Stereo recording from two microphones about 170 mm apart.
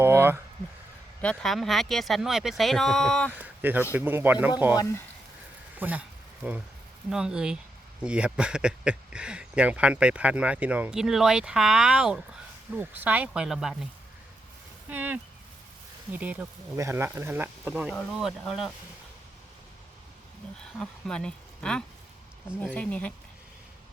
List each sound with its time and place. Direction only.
0.0 s a sound: 15° right (ahead or behind)
1.2 s speech: 5° left (ahead or behind)
3.3 s speech: 10° right (ahead or behind)
4.8 s speech: 15° left (ahead or behind)
5.8 s speech: 10° right (ahead or behind)
7.1 s speech: 5° right (ahead or behind)
14.8 s speech: 10° right (ahead or behind)
20.7 s speech: 5° left (ahead or behind)